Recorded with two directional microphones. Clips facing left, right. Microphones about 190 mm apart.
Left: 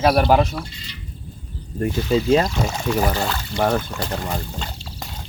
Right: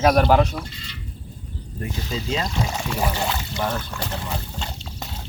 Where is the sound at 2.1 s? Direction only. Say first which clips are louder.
Left 11 dB; 55° left (ahead or behind).